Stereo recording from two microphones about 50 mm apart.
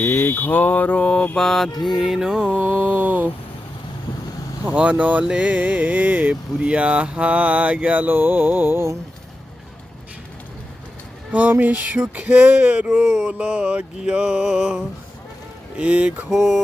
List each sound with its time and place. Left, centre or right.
0.0 s mantra: left
1.4 s mantra: centre
2.6 s mantra: right
4.6 s mantra: right
6.7 s music: right
8.1 s mantra: right
11.3 s speech: right
11.6 s mantra: right
12.1 s music: right
16.3 s mantra: centre